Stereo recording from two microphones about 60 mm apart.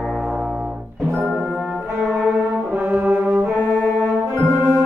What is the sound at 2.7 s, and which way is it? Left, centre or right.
Brass instrument, right.